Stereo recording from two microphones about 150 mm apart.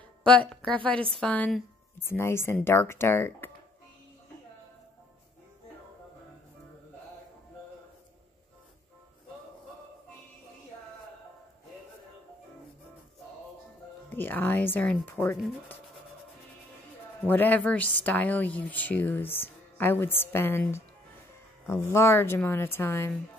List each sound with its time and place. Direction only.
0.2 s a woman's voice: 5° left (ahead or behind)
14.1 s speech: 15° left (ahead or behind)
17.3 s speech: 10° left (ahead or behind)